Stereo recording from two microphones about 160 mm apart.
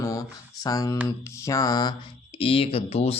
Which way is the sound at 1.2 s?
20° left (ahead or behind).